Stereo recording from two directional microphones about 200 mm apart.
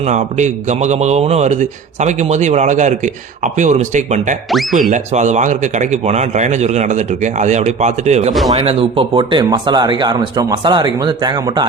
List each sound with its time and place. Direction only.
0.0 s a man's voice: 35° right (ahead or behind)
4.4 s speech: centre (ahead or behind)
4.9 s a man's voice: 35° right (ahead or behind); by 11.7 s 20° right (ahead or behind)